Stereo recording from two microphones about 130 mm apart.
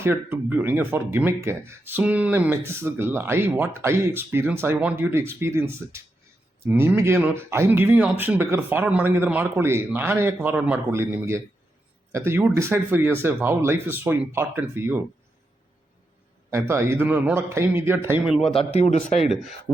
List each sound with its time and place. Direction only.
0.0 s speech: 15° right (ahead or behind)
16.5 s speech: 20° right (ahead or behind)
18.3 s speech: centre (ahead or behind)